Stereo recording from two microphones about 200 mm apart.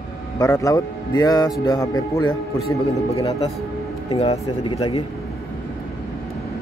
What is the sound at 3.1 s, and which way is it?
Mantra, 30° left (ahead or behind).